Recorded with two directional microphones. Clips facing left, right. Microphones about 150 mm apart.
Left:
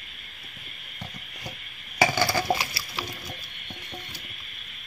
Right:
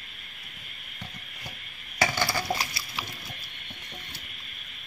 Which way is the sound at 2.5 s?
75° left (ahead or behind).